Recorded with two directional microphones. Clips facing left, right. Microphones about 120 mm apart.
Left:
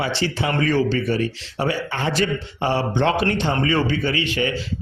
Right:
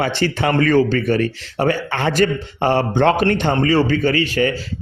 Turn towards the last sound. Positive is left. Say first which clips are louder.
# right 5 dB
turn(degrees=-40)  # may be behind; listen again after turning